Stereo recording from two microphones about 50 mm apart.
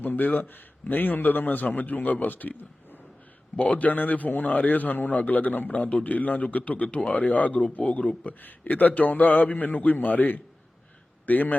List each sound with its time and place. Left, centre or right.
0.0 s a man's voice: left